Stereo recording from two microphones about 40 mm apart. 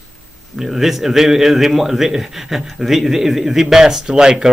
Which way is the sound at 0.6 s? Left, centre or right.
Centre.